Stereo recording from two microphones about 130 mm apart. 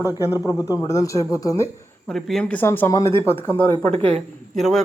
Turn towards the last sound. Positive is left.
turn(degrees=0)  # may be behind; listen again after turning